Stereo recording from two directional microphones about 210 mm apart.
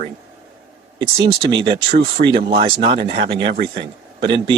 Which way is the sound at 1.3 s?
25° right (ahead or behind).